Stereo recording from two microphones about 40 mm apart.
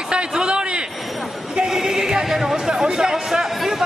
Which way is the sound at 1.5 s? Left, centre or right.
Centre.